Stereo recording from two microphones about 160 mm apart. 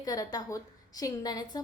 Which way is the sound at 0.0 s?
25° left (ahead or behind).